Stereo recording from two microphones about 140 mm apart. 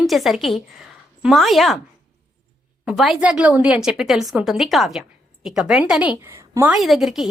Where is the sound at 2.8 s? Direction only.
Centre (ahead or behind).